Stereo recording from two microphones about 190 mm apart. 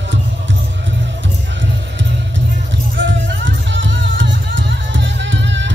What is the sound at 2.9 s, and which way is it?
Music, 80° right.